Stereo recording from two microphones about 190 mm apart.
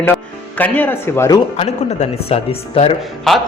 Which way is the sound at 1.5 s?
35° left (ahead or behind).